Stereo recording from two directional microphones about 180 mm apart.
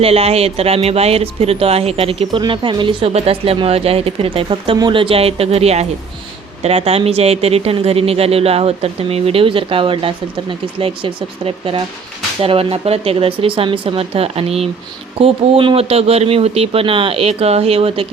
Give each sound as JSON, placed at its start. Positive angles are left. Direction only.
{"t": 0.0, "sound": "speech", "side_deg": -35}